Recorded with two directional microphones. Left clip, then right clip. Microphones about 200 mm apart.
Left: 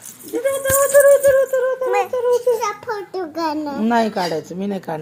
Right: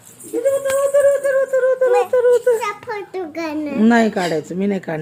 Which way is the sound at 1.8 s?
20° right (ahead or behind).